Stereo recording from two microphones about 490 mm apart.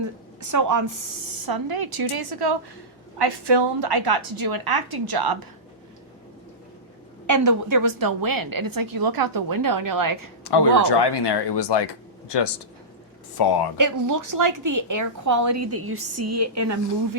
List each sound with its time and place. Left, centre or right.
0.4 s a woman's voice: right
7.3 s a woman's voice: right
10.4 s speech: left
13.7 s a woman's voice: right